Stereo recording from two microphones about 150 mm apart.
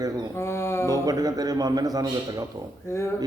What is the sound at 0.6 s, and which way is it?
Music, 15° left (ahead or behind).